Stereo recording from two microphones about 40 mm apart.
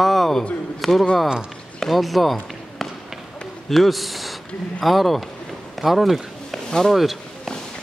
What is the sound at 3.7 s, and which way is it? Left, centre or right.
A man's voice, centre.